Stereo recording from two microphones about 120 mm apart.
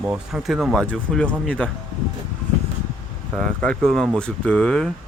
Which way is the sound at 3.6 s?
5° left (ahead or behind).